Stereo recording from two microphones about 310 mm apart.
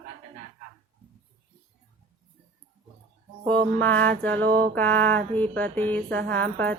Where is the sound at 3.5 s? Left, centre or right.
Centre.